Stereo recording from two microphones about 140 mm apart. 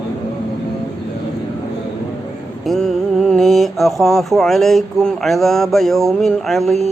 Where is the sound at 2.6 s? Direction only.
Centre (ahead or behind).